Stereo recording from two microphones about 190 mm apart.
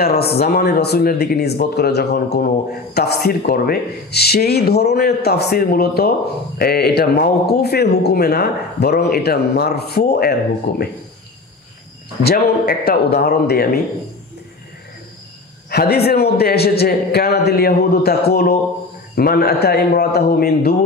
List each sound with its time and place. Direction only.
0.0 s speech: 55° left (ahead or behind)
12.2 s speech: 55° left (ahead or behind)
15.7 s speech: 55° left (ahead or behind)